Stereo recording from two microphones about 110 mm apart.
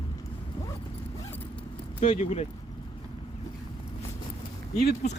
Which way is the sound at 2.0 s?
70° left (ahead or behind).